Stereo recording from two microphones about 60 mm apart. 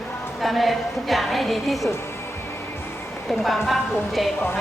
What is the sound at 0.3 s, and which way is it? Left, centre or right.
A woman's voice, centre.